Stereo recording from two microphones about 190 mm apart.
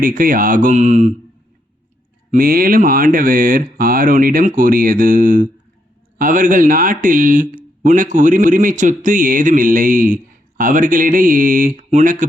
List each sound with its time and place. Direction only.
0.0 s speech: 45° right (ahead or behind)
2.3 s speech: 50° right (ahead or behind)